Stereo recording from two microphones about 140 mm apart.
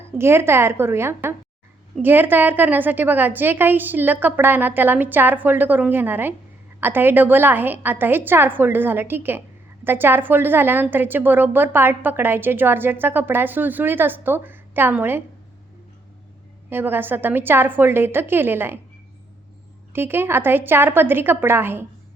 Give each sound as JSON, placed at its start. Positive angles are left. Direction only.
{"t": 0.2, "sound": "a woman's voice", "side_deg": -20}
{"t": 16.6, "sound": "a woman's voice", "side_deg": -15}
{"t": 19.9, "sound": "a woman's voice", "side_deg": -15}